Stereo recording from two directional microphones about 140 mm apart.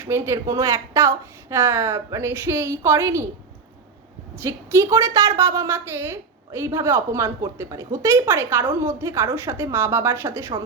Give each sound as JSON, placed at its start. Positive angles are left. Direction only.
{"t": 0.0, "sound": "a woman's voice", "side_deg": -20}
{"t": 4.4, "sound": "a woman's voice", "side_deg": -20}